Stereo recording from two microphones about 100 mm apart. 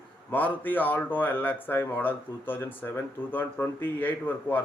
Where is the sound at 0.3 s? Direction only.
15° left (ahead or behind).